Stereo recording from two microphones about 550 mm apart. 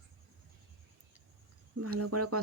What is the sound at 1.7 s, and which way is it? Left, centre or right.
Speech, right.